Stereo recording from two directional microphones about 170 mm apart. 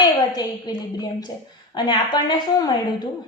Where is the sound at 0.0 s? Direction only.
25° left (ahead or behind).